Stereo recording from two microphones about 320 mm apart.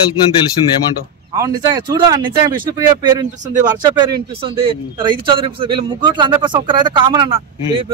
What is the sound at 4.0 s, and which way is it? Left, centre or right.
Speech, centre.